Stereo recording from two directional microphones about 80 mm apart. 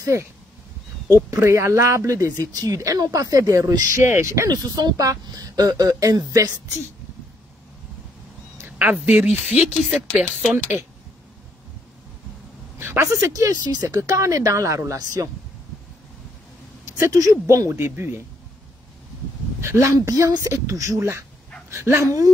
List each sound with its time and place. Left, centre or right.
0.0 s speech: right
1.3 s speech: right
4.0 s speech: right
4.5 s speech: right
8.5 s a sound: right
9.0 s speech: centre
9.8 s a sound: centre
12.7 s speech: right
16.8 s speech: right
19.6 s speech: right